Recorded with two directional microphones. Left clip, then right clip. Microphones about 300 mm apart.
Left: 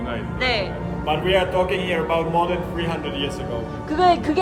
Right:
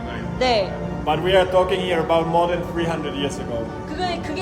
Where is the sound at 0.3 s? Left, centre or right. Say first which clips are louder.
Right 4 dB; centre.